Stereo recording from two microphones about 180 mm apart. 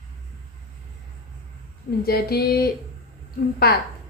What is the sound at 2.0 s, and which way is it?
Speech, 60° left (ahead or behind).